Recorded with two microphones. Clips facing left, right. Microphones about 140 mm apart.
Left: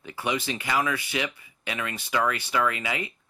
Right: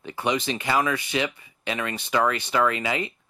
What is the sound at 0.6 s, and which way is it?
Speech, 35° right (ahead or behind).